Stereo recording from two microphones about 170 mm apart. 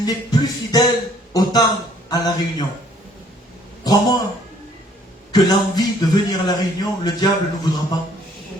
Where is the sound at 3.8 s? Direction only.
25° left (ahead or behind).